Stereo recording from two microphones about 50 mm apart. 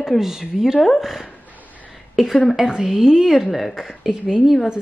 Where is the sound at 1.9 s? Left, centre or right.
Centre.